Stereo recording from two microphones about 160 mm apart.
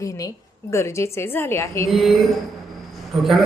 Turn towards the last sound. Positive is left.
turn(degrees=0)  # may be behind; listen again after turning